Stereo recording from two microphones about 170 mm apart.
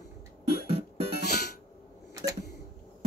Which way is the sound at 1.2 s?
70° left (ahead or behind).